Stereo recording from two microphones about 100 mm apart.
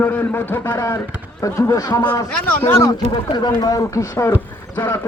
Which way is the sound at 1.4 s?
30° left (ahead or behind).